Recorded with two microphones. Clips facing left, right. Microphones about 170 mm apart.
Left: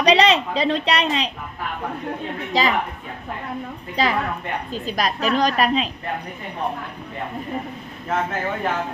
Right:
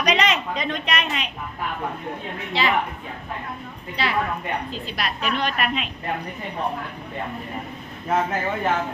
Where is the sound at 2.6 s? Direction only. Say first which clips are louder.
Left 3 dB; 40° left (ahead or behind).